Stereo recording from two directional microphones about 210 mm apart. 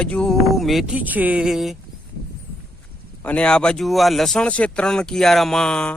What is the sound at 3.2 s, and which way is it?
Speech, 5° left (ahead or behind).